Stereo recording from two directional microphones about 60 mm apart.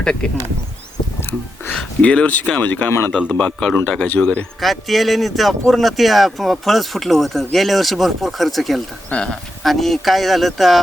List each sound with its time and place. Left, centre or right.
0.0 s a man's voice: centre
1.7 s a man's voice: centre
9.1 s a man's voice: centre
9.6 s speech: centre